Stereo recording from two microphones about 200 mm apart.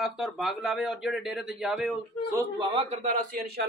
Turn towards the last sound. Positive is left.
turn(degrees=-35)  # may be behind; listen again after turning